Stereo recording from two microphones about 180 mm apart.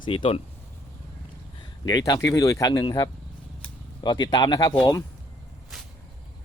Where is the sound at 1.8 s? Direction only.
20° left (ahead or behind).